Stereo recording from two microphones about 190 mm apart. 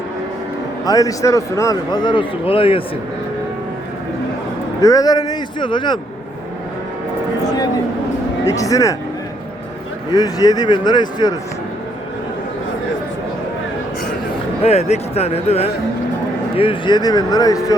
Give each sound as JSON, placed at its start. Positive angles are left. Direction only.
{"t": 0.9, "sound": "a man's voice", "side_deg": 20}
{"t": 4.8, "sound": "a man's voice", "side_deg": 20}
{"t": 7.4, "sound": "a sound", "side_deg": 20}
{"t": 8.4, "sound": "speech", "side_deg": 15}
{"t": 10.1, "sound": "a man's voice", "side_deg": 20}
{"t": 14.6, "sound": "a man's voice", "side_deg": 35}